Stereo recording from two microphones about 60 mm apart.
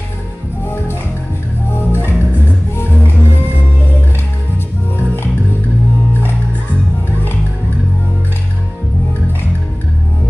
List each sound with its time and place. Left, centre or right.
1.8 s music: left
4.9 s music: left